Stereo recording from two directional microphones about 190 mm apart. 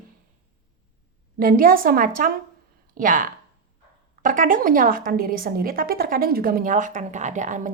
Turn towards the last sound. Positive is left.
turn(degrees=-40)  # may be behind; listen again after turning